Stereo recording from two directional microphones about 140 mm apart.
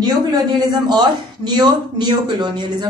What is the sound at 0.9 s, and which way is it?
Speech, 30° right (ahead or behind).